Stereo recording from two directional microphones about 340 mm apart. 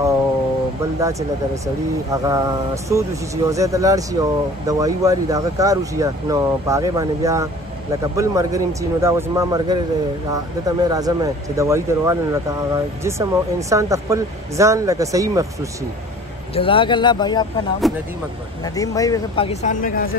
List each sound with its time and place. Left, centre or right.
2.2 s speech: centre
16.5 s speech: centre
17.9 s speech: centre
18.6 s speech: centre